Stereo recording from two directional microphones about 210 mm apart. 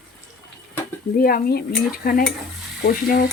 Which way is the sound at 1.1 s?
45° left (ahead or behind).